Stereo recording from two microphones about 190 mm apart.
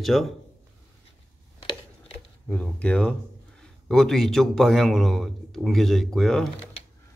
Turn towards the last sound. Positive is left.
turn(degrees=0)  # may be behind; listen again after turning